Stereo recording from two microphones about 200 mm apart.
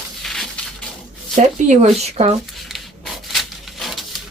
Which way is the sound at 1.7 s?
35° right (ahead or behind).